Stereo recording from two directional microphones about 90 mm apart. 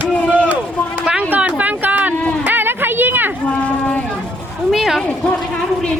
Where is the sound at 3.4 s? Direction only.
15° left (ahead or behind).